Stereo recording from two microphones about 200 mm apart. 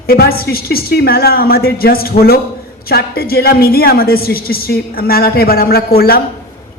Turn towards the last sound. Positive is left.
turn(degrees=50)  # may be behind; listen again after turning